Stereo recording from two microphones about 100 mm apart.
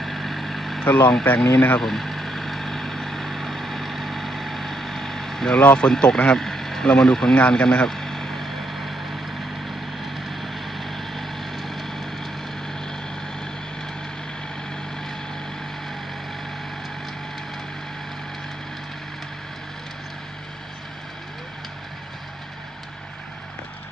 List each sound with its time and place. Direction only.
0.0 s vehicle: centre (ahead or behind)
0.9 s speech: 20° left (ahead or behind)
1.8 s vehicle: centre (ahead or behind)
10.0 s vehicle: centre (ahead or behind)